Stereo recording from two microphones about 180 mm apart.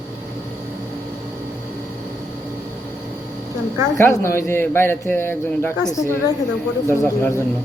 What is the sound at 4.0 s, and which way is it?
A man's voice, 15° left (ahead or behind).